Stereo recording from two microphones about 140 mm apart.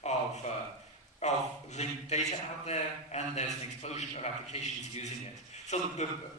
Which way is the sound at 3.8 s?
50° left (ahead or behind).